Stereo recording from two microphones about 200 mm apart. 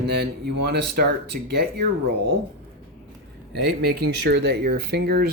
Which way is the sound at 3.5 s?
55° right (ahead or behind).